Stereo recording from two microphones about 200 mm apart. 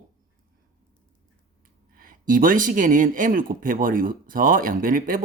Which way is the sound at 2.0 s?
45° right (ahead or behind).